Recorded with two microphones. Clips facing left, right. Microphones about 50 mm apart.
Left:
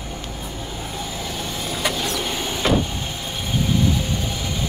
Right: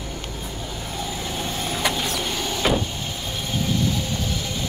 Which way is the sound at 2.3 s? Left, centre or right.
Centre.